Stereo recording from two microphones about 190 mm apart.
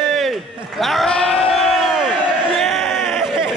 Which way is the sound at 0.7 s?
Centre (ahead or behind).